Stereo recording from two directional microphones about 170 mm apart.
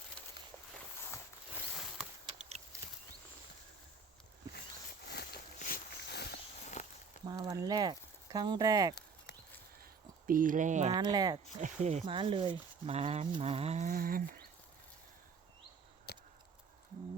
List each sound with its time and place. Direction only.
1.5 s a sound: centre (ahead or behind)
5.5 s walk: 55° left (ahead or behind)
6.8 s a sound: 40° left (ahead or behind)
7.3 s speech: 20° right (ahead or behind)
10.2 s speech: 55° right (ahead or behind)
10.9 s speech: 25° right (ahead or behind)
11.6 s speech: 45° right (ahead or behind)
12.0 s speech: 30° right (ahead or behind); by 14.4 s 55° right (ahead or behind)
16.1 s a sound: 70° left (ahead or behind)